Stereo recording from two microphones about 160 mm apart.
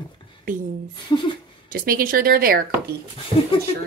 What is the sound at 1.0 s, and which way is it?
Speech, 30° left (ahead or behind).